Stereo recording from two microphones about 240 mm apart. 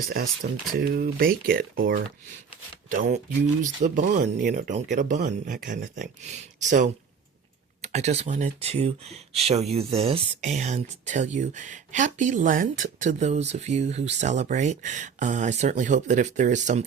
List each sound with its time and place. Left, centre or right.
0.7 s speech: right